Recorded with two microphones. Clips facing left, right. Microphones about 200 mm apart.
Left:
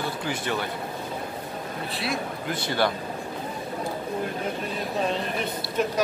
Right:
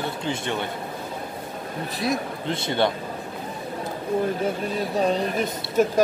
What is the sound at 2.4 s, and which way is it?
Speech, 25° right (ahead or behind).